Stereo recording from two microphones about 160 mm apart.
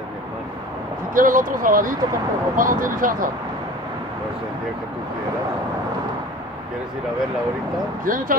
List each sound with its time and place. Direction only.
1.1 s speech: 60° right (ahead or behind)
8.0 s speech: 60° right (ahead or behind)